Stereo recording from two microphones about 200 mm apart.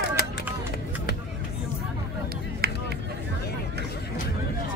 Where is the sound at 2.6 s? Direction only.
50° right (ahead or behind).